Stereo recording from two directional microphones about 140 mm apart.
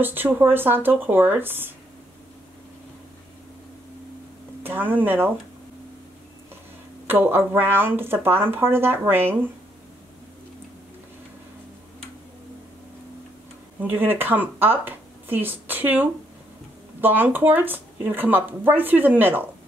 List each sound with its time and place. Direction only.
0.0 s speech: 15° right (ahead or behind)
4.6 s speech: 15° right (ahead or behind)
7.1 s speech: 15° right (ahead or behind)
13.7 s speech: 15° right (ahead or behind)